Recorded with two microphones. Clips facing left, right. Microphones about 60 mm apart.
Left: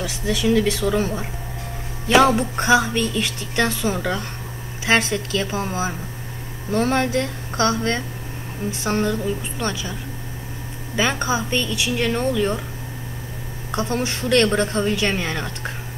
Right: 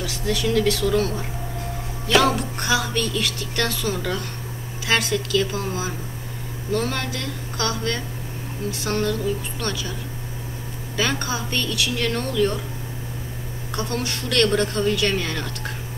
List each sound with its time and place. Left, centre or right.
0.0 s a woman's voice: centre
11.0 s a woman's voice: left
13.7 s a woman's voice: left